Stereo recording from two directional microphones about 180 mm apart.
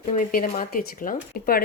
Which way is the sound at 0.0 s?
45° left (ahead or behind).